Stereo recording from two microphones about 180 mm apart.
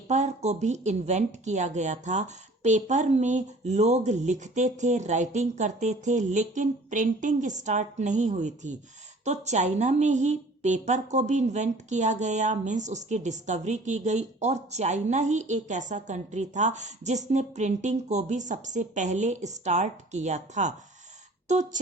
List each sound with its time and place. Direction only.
0.1 s a woman's voice: 40° right (ahead or behind)